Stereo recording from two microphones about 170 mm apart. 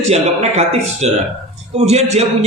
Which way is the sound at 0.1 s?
40° right (ahead or behind).